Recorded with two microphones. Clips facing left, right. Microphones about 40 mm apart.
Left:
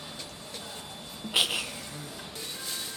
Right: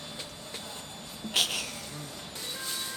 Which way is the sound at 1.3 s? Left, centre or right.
Centre.